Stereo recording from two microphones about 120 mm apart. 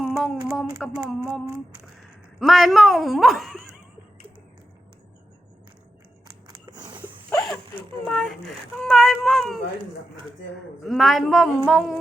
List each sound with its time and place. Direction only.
0.0 s a sound: centre (ahead or behind)
2.4 s a woman's voice: centre (ahead or behind)
6.5 s scissors: 35° right (ahead or behind)
7.5 s a woman's voice: 10° left (ahead or behind)
10.8 s a woman's voice: centre (ahead or behind)